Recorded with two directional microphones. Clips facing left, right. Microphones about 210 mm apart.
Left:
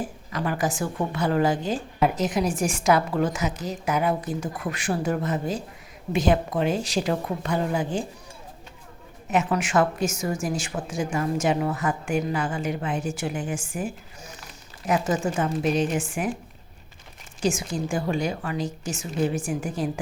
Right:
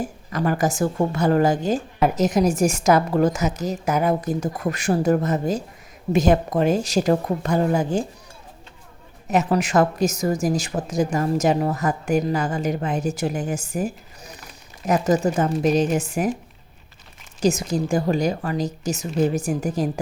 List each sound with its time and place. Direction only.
0.0 s a woman's voice: 45° right (ahead or behind)
9.3 s a woman's voice: 40° right (ahead or behind)
17.4 s a woman's voice: 40° right (ahead or behind)